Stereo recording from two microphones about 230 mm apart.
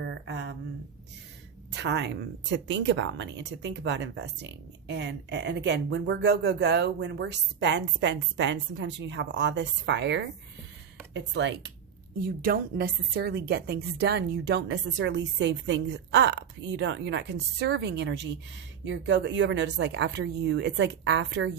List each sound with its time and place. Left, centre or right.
0.0 s speech: right
1.7 s speech: right